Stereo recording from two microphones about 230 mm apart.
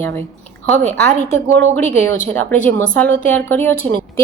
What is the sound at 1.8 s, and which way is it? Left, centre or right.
Speech, left.